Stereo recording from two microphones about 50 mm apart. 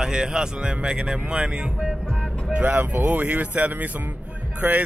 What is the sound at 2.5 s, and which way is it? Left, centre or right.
Speech, right.